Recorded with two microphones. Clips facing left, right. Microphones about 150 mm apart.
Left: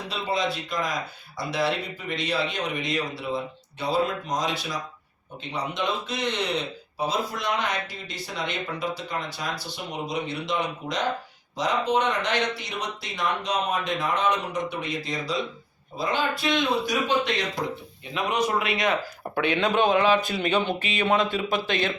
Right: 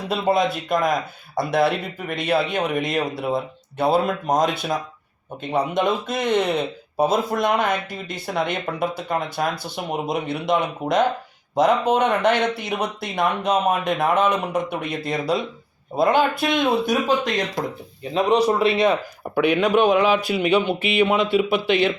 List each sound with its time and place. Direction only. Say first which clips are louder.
0.1 s speech: right 8 dB; 50° right (ahead or behind)
18.1 s speech: right 7 dB; 35° right (ahead or behind)
19.3 s speech: right 6 dB; 10° right (ahead or behind)